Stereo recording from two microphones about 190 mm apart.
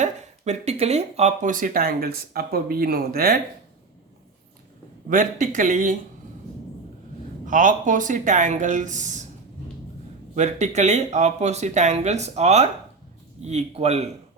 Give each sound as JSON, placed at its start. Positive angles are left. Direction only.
{"t": 0.0, "sound": "speech", "side_deg": -35}
{"t": 5.0, "sound": "speech", "side_deg": -45}
{"t": 7.4, "sound": "speech", "side_deg": -45}
{"t": 10.3, "sound": "speech", "side_deg": -35}